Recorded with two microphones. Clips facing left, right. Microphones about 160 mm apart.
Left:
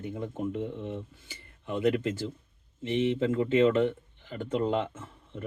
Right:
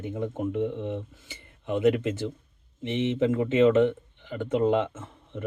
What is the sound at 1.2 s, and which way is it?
Speech, 20° right (ahead or behind).